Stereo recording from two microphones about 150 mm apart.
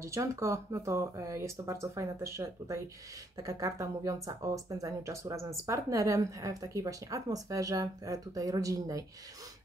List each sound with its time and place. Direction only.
0.0 s speech: 20° right (ahead or behind)